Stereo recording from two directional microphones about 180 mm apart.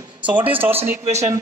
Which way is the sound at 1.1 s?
40° right (ahead or behind).